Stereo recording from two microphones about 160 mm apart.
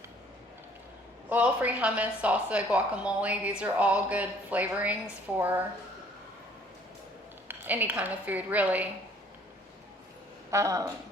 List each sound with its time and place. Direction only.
1.3 s a woman's voice: 10° right (ahead or behind)
7.4 s a woman's voice: 10° right (ahead or behind)
10.5 s speech: 20° right (ahead or behind)